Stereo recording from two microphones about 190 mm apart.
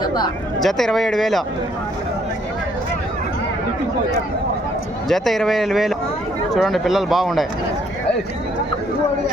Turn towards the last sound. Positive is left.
turn(degrees=0)  # may be behind; listen again after turning